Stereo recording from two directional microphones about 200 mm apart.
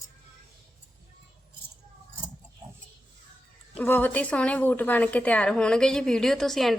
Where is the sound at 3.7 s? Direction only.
10° left (ahead or behind).